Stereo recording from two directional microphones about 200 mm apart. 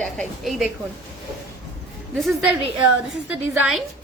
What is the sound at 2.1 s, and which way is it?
A woman's voice, centre (ahead or behind).